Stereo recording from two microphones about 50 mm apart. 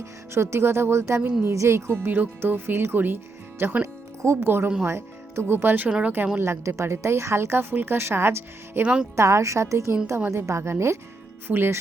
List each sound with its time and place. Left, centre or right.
0.0 s a woman's voice: right
1.2 s speech: right
1.5 s speech: right
4.2 s speech: right
4.4 s speech: right
6.4 s a woman's voice: right
8.8 s speech: right
9.1 s a woman's voice: right
11.4 s speech: right